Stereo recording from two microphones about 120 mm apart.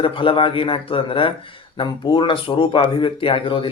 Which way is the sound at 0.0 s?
45° left (ahead or behind).